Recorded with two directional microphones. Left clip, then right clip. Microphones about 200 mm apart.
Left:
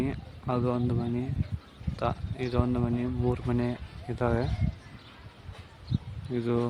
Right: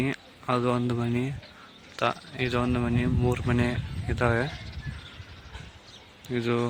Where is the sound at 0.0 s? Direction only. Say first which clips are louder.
Right 3 dB; centre (ahead or behind).